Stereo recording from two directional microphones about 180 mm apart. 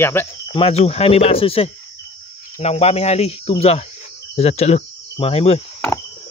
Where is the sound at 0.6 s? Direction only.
35° left (ahead or behind).